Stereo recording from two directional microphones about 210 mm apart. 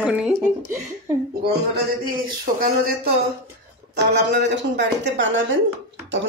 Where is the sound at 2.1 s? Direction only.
45° right (ahead or behind).